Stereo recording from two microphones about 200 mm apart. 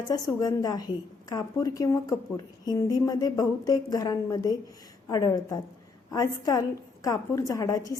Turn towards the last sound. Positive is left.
turn(degrees=20)  # may be behind; listen again after turning